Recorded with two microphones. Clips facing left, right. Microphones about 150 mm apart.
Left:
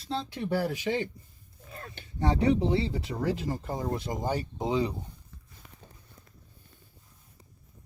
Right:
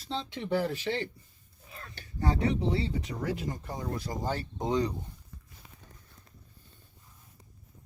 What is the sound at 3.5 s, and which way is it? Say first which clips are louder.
Speech: left 4 dB; 30° left (ahead or behind).